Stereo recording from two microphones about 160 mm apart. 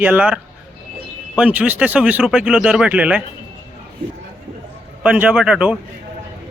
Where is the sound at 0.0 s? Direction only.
10° right (ahead or behind).